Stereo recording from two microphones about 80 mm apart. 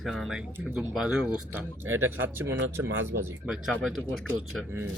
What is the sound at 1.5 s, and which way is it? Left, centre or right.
Speech, right.